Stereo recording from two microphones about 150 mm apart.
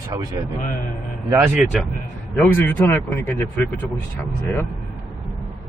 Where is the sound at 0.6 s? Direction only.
65° left (ahead or behind).